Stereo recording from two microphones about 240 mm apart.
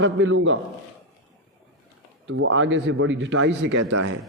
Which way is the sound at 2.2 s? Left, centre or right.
Right.